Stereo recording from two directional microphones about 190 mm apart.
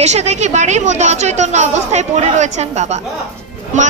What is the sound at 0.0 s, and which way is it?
Speech, 35° right (ahead or behind).